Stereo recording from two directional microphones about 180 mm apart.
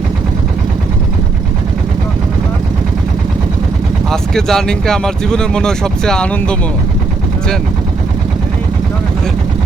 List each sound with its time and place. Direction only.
4.1 s speech: centre (ahead or behind)